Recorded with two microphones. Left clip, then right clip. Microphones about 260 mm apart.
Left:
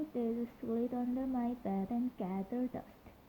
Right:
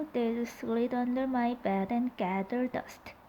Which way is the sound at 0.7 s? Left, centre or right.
Centre.